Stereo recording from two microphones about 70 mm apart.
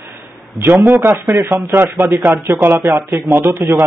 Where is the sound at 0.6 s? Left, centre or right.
Right.